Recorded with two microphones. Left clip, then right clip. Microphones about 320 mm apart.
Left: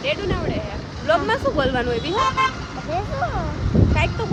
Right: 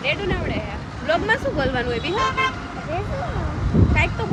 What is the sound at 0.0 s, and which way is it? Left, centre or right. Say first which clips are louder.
Vehicle: even; centre.